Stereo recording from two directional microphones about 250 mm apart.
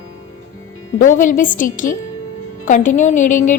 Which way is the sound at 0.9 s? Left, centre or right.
Left.